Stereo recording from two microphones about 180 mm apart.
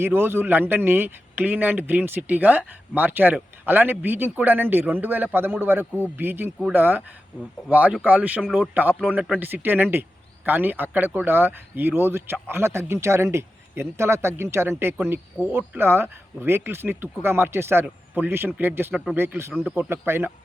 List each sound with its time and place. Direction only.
0.0 s speech: 10° right (ahead or behind)